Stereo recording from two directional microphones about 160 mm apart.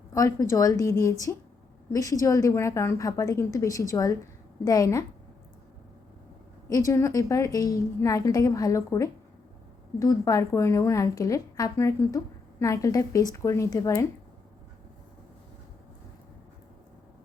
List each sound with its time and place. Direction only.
0.1 s a woman's voice: 20° left (ahead or behind)
6.7 s a woman's voice: 20° left (ahead or behind)